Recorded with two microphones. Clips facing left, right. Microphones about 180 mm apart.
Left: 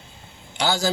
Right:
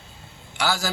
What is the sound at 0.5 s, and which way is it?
Speech, 20° left (ahead or behind).